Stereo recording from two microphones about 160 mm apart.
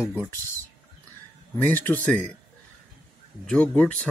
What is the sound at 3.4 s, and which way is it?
Speech, 10° left (ahead or behind).